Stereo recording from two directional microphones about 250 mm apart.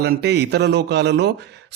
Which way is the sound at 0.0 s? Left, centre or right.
Right.